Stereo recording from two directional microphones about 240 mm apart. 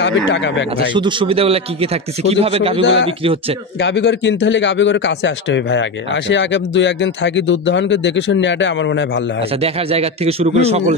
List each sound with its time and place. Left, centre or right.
0.0 s a man's voice: left
0.9 s a man's voice: right
2.8 s a man's voice: left
9.6 s a man's voice: right